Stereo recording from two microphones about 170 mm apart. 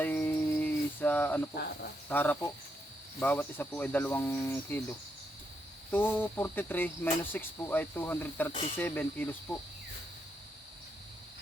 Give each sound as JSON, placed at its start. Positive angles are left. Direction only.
{"t": 0.0, "sound": "music", "side_deg": 10}
{"t": 1.5, "sound": "speech", "side_deg": 65}
{"t": 2.0, "sound": "speech", "side_deg": 10}
{"t": 5.9, "sound": "speech", "side_deg": 10}